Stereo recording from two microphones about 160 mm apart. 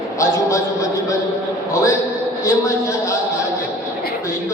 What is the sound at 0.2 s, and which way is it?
Speech, 20° left (ahead or behind).